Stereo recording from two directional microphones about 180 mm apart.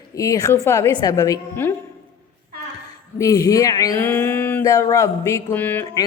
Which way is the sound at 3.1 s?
20° left (ahead or behind).